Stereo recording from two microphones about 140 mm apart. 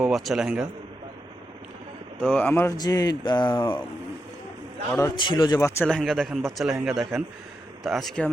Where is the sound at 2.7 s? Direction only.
30° left (ahead or behind).